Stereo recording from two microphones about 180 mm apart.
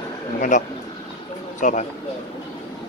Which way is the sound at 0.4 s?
45° left (ahead or behind).